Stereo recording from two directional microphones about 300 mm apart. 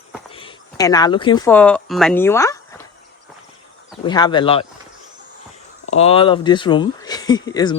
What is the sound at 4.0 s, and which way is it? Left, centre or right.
Speech, centre.